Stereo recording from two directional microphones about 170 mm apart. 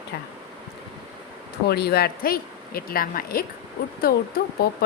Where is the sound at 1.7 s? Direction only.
70° left (ahead or behind).